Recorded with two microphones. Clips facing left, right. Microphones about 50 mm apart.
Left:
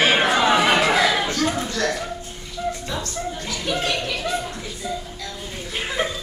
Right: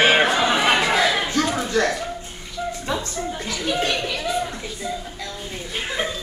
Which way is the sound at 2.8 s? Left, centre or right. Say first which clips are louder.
Right 2 dB; right.